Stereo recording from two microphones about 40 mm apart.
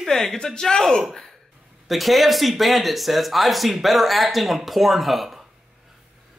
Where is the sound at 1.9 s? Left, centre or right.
Centre.